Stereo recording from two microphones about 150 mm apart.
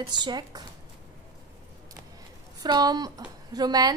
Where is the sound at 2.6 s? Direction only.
25° right (ahead or behind).